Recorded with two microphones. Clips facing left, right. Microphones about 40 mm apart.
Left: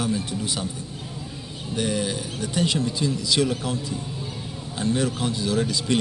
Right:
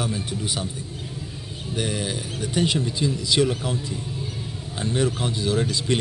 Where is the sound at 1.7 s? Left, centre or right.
Centre.